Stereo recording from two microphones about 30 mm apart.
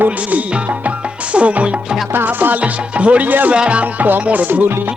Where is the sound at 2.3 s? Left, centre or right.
Right.